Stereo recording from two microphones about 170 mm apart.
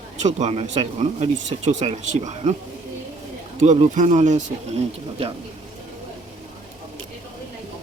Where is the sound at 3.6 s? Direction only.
45° right (ahead or behind).